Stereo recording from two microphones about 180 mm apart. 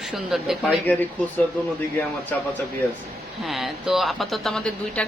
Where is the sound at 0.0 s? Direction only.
Centre (ahead or behind).